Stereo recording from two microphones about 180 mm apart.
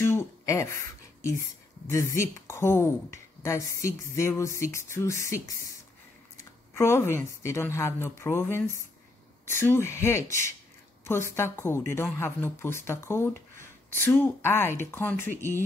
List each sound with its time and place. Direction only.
0.0 s a sound: 15° left (ahead or behind)
1.9 s a woman's voice: 15° left (ahead or behind)
6.7 s a woman's voice: 15° left (ahead or behind)